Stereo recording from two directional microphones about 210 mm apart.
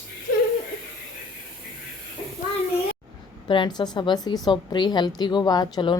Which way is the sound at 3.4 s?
20° left (ahead or behind).